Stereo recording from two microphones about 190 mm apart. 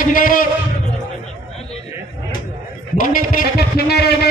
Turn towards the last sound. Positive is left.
turn(degrees=55)  # may be behind; listen again after turning